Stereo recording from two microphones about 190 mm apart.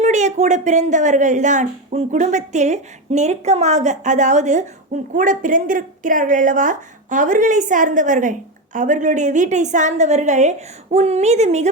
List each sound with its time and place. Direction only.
0.0 s a woman's voice: 40° right (ahead or behind)